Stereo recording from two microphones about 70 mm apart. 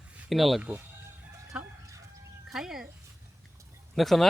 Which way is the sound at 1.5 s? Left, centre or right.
Centre.